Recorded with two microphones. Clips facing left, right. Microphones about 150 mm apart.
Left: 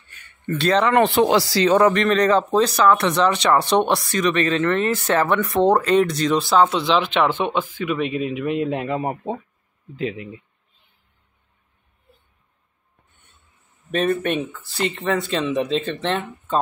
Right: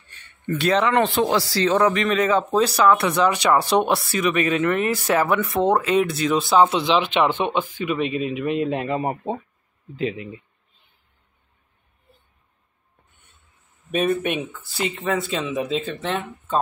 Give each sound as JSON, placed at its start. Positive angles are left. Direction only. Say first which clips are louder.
{"t": 0.1, "sound": "a sound", "louder": "left 1 dB", "side_deg": -35}
{"t": 0.5, "sound": "speech", "louder": "left 1 dB", "side_deg": -10}
{"t": 1.6, "sound": "speech", "louder": "left 3 dB", "side_deg": 15}
{"t": 1.9, "sound": "speech", "louder": "left 3 dB", "side_deg": -5}
{"t": 7.8, "sound": "speech", "louder": "left 1 dB", "side_deg": 0}
{"t": 13.9, "sound": "speech", "louder": "left 1 dB", "side_deg": -5}